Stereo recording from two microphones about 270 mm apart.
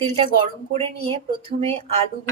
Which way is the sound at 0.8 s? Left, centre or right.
Right.